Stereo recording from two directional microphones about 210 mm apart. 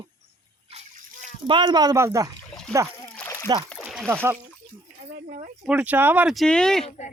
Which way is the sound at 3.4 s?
20° right (ahead or behind).